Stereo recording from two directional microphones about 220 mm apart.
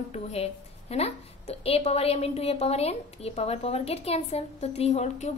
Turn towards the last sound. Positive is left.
turn(degrees=30)  # may be behind; listen again after turning